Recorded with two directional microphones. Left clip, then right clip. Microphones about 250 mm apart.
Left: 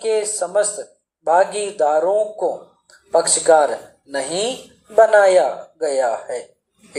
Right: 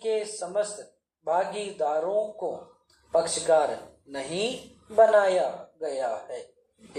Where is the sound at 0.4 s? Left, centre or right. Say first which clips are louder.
Left 10 dB; left.